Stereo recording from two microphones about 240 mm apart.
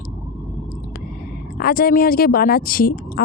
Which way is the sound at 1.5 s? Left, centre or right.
Left.